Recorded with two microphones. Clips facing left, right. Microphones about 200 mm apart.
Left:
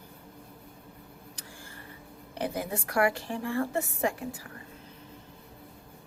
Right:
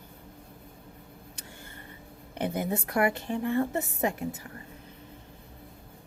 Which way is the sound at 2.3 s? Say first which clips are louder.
Right 3 dB; 20° right (ahead or behind).